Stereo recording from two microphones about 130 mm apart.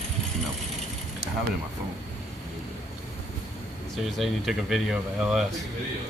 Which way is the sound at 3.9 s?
Centre (ahead or behind).